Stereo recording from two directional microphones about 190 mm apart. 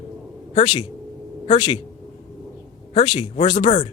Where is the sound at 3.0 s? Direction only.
30° left (ahead or behind).